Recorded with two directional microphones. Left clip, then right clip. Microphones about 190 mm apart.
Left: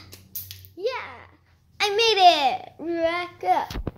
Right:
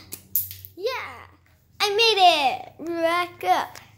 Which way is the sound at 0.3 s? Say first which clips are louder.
Right 1 dB; 5° left (ahead or behind).